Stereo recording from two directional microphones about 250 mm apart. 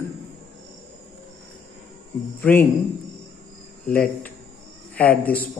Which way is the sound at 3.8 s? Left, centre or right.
Centre.